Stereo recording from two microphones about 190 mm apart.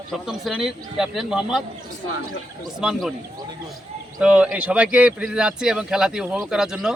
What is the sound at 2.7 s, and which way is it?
Speech, 5° right (ahead or behind).